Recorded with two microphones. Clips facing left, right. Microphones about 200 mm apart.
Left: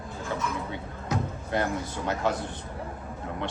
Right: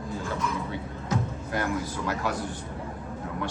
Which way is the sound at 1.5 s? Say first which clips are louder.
Left 1 dB; 25° left (ahead or behind).